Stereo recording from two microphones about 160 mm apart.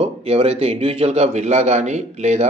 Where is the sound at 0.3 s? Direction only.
40° right (ahead or behind).